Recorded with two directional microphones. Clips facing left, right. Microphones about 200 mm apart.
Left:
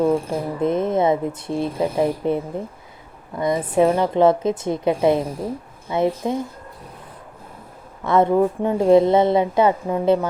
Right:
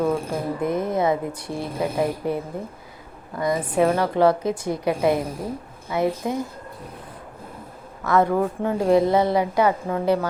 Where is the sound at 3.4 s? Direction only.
25° left (ahead or behind).